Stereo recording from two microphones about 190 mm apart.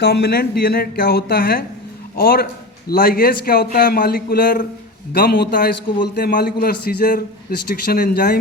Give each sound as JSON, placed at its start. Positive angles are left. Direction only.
{"t": 0.0, "sound": "a man's voice", "side_deg": 60}